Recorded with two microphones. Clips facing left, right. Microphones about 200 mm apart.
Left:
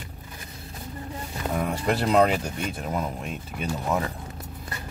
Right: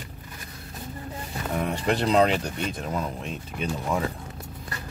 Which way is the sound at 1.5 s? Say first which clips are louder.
Even; 5° left (ahead or behind).